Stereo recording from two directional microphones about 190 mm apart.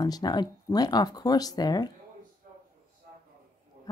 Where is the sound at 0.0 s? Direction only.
20° left (ahead or behind).